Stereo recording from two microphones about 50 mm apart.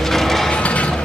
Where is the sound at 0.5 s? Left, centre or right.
Left.